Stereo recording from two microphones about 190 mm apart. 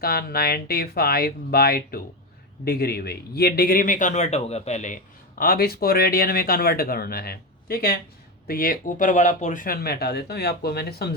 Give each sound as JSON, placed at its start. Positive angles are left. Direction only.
{"t": 0.0, "sound": "speech", "side_deg": 55}
{"t": 5.4, "sound": "speech", "side_deg": 50}